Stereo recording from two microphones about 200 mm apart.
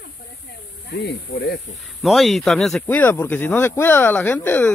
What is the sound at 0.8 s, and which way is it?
Speech, 55° left (ahead or behind).